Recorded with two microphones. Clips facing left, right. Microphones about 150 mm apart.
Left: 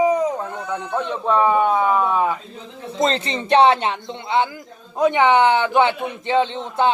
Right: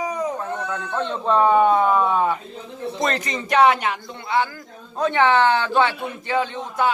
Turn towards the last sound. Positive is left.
turn(degrees=25)  # may be behind; listen again after turning